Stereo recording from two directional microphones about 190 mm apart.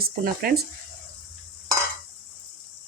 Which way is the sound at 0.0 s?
50° right (ahead or behind).